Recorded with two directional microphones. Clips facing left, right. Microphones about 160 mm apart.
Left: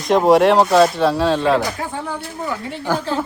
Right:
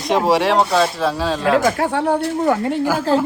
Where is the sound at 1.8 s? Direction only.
70° right (ahead or behind).